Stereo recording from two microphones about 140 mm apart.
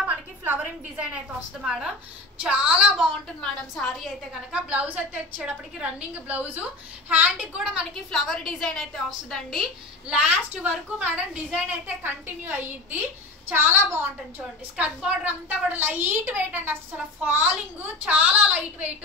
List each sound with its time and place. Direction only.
0.0 s a woman's voice: 10° right (ahead or behind)
7.9 s a woman's voice: 5° left (ahead or behind)